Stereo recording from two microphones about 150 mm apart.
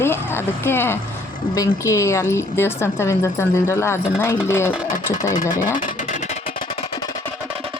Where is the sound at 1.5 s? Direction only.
20° left (ahead or behind).